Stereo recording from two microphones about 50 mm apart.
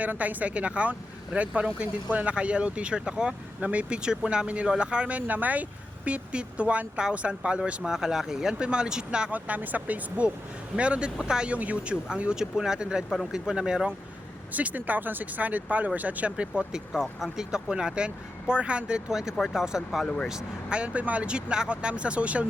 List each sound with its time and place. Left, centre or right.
0.0 s speech: right; by 3.3 s centre
3.6 s speech: right
9.3 s speech: right; by 11.5 s centre
11.5 s speech: right
14.5 s speech: right
16.9 s speech: centre
17.3 s speech: centre
19.4 s speech: centre
20.7 s speech: right